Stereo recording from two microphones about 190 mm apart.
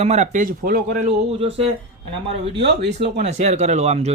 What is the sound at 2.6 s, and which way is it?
Speech, 65° right (ahead or behind).